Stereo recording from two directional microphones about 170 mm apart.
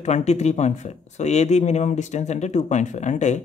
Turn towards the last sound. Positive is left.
turn(degrees=45)  # may be behind; listen again after turning